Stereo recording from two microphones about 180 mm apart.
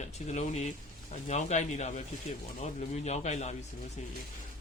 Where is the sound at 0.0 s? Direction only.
40° left (ahead or behind).